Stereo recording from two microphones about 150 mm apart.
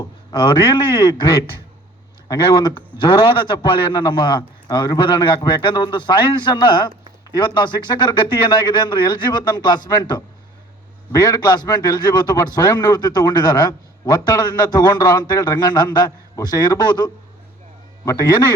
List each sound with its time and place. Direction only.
0.0 s a man's voice: 30° left (ahead or behind)